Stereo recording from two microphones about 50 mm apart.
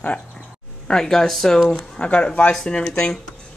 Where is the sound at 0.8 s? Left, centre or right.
Centre.